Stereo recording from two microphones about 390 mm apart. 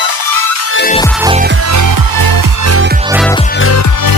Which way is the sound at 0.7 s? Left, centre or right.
Left.